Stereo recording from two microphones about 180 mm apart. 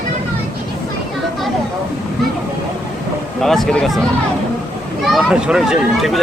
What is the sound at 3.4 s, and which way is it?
Speech, centre (ahead or behind).